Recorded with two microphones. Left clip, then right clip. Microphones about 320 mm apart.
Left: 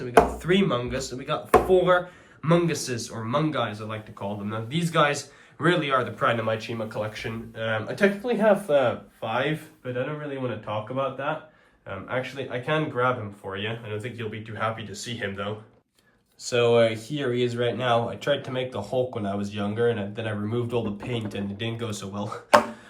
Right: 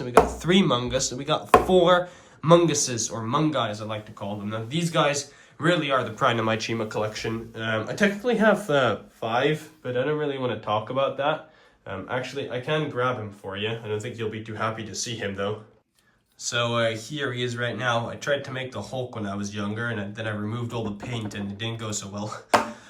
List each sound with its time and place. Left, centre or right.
0.3 s speech: centre
6.5 s speech: right
9.2 s speech: centre
16.5 s speech: centre